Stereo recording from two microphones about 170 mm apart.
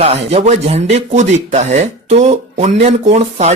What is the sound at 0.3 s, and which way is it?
Speech, 35° right (ahead or behind).